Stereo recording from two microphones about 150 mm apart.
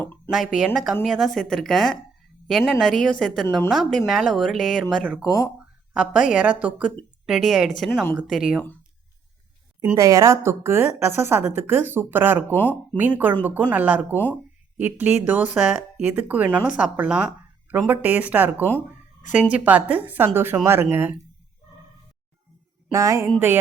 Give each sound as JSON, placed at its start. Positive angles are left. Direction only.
{"t": 0.3, "sound": "speech", "side_deg": -5}
{"t": 9.9, "sound": "speech", "side_deg": -20}
{"t": 12.5, "sound": "speech", "side_deg": 10}
{"t": 13.0, "sound": "speech", "side_deg": -10}
{"t": 22.9, "sound": "speech", "side_deg": -20}